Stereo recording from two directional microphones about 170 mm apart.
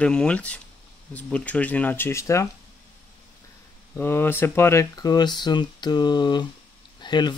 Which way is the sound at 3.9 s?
10° left (ahead or behind).